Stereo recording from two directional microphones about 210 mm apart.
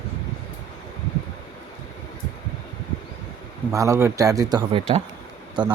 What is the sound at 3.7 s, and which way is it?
A man's voice, 15° right (ahead or behind).